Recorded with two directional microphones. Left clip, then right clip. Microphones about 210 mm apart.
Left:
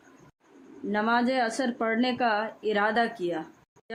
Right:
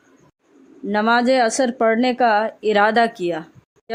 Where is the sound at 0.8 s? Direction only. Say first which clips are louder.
Right 9 dB; 45° right (ahead or behind).